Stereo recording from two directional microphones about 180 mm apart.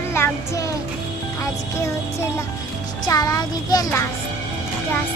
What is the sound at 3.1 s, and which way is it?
Child singing, 20° left (ahead or behind).